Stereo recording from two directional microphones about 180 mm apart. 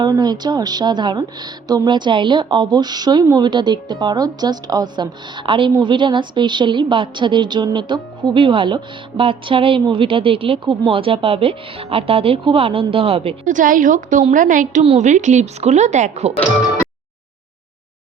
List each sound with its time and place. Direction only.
0.0 s a woman's voice: 25° right (ahead or behind)
13.5 s a woman's voice: 45° right (ahead or behind)